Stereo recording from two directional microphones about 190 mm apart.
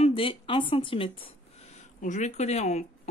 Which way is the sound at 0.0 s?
30° left (ahead or behind).